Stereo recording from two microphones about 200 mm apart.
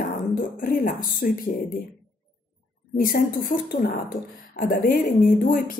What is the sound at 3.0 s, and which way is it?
Speech, 45° left (ahead or behind).